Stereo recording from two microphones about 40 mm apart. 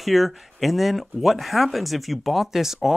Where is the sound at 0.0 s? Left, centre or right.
Centre.